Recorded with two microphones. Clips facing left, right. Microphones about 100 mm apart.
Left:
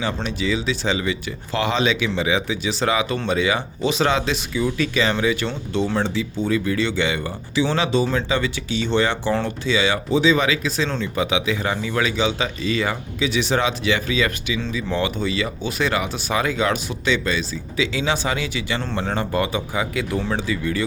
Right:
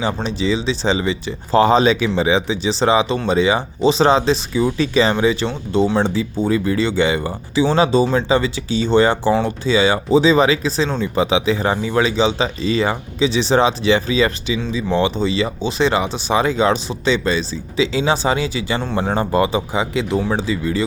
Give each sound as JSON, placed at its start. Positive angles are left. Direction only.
{"t": 0.0, "sound": "speech", "side_deg": -30}
{"t": 10.8, "sound": "speech", "side_deg": -15}
{"t": 11.1, "sound": "speech", "side_deg": -30}
{"t": 18.8, "sound": "speech", "side_deg": -15}